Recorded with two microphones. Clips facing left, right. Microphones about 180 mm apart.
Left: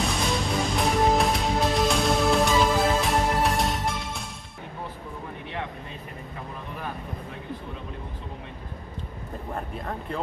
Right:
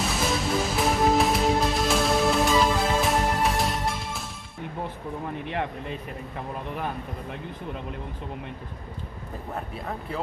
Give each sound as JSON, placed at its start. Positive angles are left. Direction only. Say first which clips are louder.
{"t": 0.1, "sound": "music", "louder": "right 1 dB", "side_deg": -5}
{"t": 5.5, "sound": "speech", "louder": "right 4 dB", "side_deg": -60}
{"t": 9.5, "sound": "speech", "louder": "even", "side_deg": -5}